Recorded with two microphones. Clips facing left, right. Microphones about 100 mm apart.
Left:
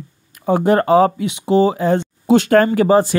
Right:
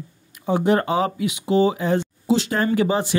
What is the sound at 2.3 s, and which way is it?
Speech, 55° left (ahead or behind).